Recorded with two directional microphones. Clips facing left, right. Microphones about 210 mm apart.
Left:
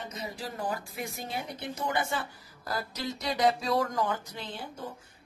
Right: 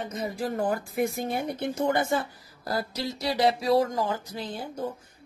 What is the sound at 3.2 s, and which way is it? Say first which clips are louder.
Speech: right 3 dB; 30° right (ahead or behind).